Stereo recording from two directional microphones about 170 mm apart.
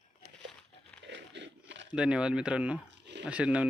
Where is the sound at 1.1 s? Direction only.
90° right.